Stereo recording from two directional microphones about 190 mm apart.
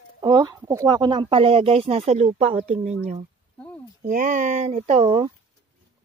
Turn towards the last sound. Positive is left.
turn(degrees=-30)  # may be behind; listen again after turning